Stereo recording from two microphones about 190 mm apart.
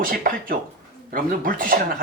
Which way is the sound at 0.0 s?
50° right (ahead or behind).